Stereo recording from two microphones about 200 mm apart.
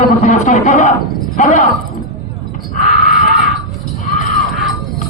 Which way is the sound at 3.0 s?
Centre (ahead or behind).